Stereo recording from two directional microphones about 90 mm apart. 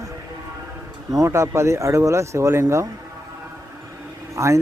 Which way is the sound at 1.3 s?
30° right (ahead or behind).